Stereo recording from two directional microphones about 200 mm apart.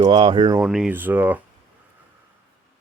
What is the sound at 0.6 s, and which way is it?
Speech, 5° right (ahead or behind).